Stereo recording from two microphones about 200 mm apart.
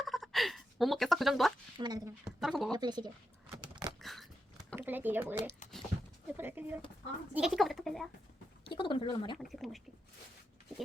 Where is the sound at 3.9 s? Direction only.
Centre (ahead or behind).